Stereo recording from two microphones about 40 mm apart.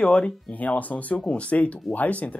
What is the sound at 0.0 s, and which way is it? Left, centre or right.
Speech, left.